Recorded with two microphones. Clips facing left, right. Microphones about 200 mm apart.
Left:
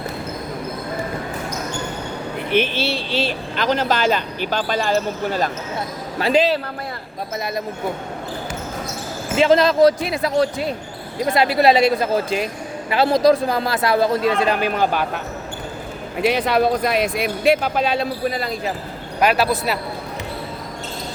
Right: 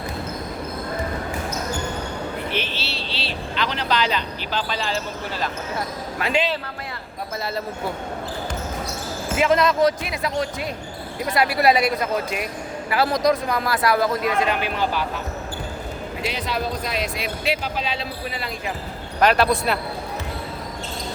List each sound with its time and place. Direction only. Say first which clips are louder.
2.5 s speech: left 9 dB; 55° left (ahead or behind)
6.1 s speech: left 6 dB; 35° left (ahead or behind)
9.3 s speech: left 4 dB; 30° left (ahead or behind)
11.3 s a man's voice: left 3 dB; 25° left (ahead or behind); by 15.2 s 50° left (ahead or behind)
16.2 s speech: left 10 dB; 60° left (ahead or behind); by 18.7 s 40° left (ahead or behind)
19.2 s speech: even; 5° left (ahead or behind)